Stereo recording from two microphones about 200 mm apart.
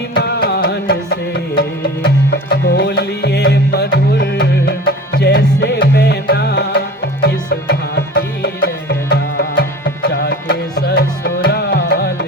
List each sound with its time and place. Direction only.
0.1 s music: 55° left (ahead or behind)